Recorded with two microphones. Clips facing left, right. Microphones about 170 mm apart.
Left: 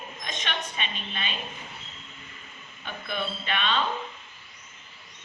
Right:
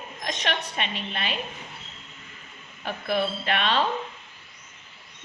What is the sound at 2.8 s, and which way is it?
A woman's voice, 75° right (ahead or behind).